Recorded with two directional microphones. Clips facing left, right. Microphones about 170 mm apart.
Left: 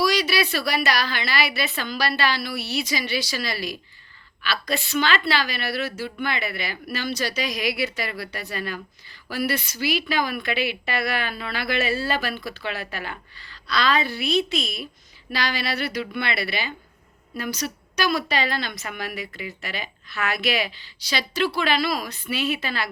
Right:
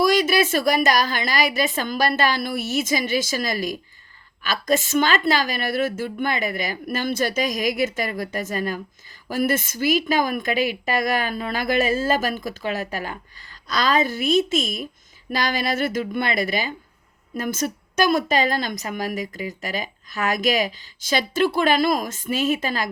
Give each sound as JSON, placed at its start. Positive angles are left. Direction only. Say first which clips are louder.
{"t": 0.0, "sound": "a woman's voice", "louder": "right 4 dB", "side_deg": -50}